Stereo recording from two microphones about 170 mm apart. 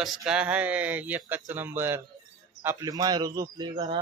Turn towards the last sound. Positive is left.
turn(degrees=-25)  # may be behind; listen again after turning